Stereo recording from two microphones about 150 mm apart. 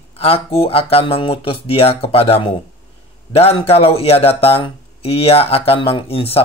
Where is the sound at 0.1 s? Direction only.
40° left (ahead or behind).